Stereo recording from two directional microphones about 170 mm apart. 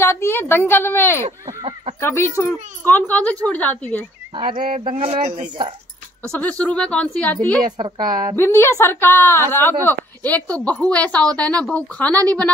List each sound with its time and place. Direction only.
0.0 s a woman's voice: 15° left (ahead or behind)
4.4 s a woman's voice: 30° right (ahead or behind)
6.3 s a woman's voice: 10° left (ahead or behind)
7.7 s a woman's voice: 25° right (ahead or behind)
8.4 s a woman's voice: 15° left (ahead or behind)